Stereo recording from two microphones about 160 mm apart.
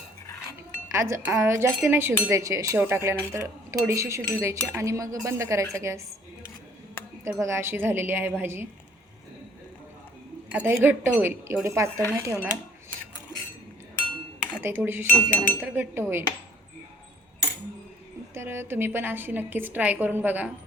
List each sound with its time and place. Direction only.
0.9 s a woman's voice: 20° right (ahead or behind)
7.3 s a woman's voice: 15° right (ahead or behind)
10.5 s a woman's voice: 10° right (ahead or behind)
14.6 s a woman's voice: 15° right (ahead or behind)
15.1 s speech: 10° left (ahead or behind)
15.6 s a woman's voice: 15° right (ahead or behind)
18.3 s a woman's voice: 15° right (ahead or behind)